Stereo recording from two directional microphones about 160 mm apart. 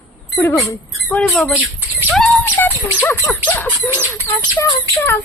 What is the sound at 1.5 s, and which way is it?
Speech, 10° right (ahead or behind).